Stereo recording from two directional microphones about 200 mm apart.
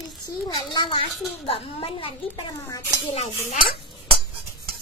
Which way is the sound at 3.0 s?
30° left (ahead or behind).